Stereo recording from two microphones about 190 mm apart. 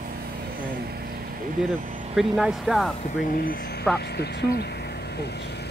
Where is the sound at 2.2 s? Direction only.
Centre (ahead or behind).